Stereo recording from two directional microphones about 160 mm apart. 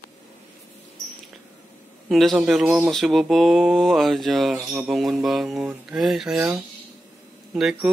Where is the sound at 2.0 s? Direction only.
Centre (ahead or behind).